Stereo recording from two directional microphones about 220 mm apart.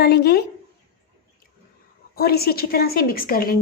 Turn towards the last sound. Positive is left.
turn(degrees=40)  # may be behind; listen again after turning